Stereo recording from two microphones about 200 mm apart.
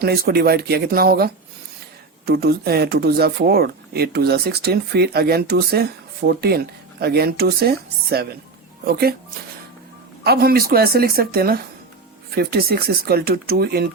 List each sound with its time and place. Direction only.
0.0 s speech: 50° right (ahead or behind)
10.2 s speech: 50° right (ahead or behind)